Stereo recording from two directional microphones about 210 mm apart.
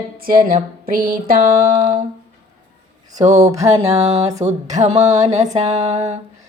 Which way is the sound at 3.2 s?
35° right (ahead or behind).